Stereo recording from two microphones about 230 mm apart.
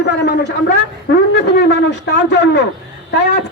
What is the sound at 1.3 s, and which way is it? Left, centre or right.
A woman's voice, left.